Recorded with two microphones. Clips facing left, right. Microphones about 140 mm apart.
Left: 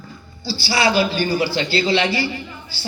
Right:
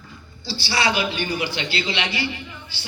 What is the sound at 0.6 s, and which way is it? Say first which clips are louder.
A man's voice: left 5 dB; 35° left (ahead or behind).